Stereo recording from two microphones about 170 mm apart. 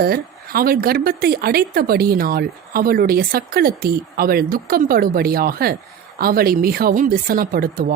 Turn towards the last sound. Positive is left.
turn(degrees=-55)  # may be behind; listen again after turning